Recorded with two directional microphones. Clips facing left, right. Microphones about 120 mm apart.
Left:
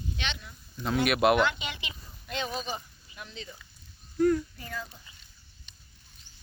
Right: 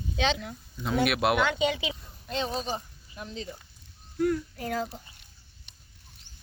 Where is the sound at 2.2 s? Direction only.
30° right (ahead or behind).